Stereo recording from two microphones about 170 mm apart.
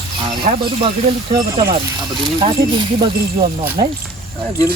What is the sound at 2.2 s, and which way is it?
Speech, 30° right (ahead or behind).